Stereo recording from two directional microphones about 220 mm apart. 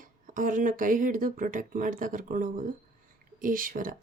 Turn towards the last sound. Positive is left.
turn(degrees=-40)  # may be behind; listen again after turning